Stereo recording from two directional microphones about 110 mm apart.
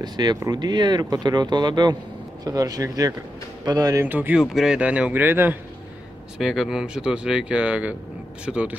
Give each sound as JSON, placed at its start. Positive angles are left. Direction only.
{"t": 0.0, "sound": "speech", "side_deg": -40}
{"t": 4.0, "sound": "speech", "side_deg": -15}
{"t": 4.4, "sound": "speech", "side_deg": -5}
{"t": 6.3, "sound": "speech", "side_deg": -5}